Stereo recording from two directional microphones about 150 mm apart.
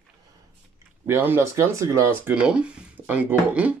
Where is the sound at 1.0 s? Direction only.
15° right (ahead or behind).